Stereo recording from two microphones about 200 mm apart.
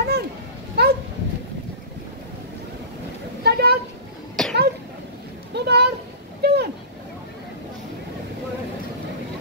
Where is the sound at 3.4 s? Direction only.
55° right (ahead or behind).